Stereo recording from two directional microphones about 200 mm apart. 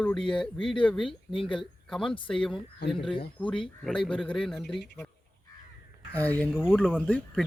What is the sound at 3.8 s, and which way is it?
Speech, 5° left (ahead or behind).